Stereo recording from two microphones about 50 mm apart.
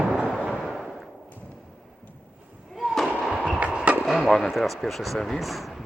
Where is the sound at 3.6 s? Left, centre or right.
Right.